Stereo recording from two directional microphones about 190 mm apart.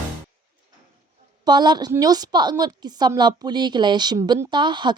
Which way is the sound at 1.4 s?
25° right (ahead or behind).